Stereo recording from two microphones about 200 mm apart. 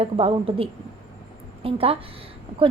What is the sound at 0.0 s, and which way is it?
A woman's voice, 30° right (ahead or behind).